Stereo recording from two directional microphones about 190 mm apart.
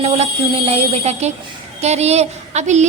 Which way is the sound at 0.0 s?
30° right (ahead or behind).